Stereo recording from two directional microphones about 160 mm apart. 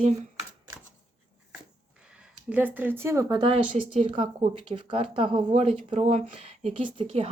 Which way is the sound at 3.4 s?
40° right (ahead or behind).